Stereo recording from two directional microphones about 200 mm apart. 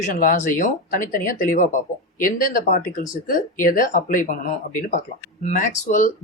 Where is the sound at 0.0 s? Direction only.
45° left (ahead or behind).